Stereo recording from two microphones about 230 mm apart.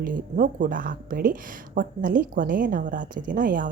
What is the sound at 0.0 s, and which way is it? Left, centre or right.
Speech, right.